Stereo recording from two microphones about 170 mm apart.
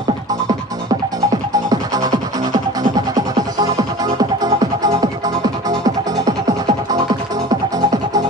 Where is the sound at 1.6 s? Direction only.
25° right (ahead or behind).